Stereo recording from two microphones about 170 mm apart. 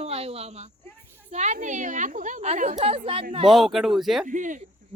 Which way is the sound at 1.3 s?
45° right (ahead or behind).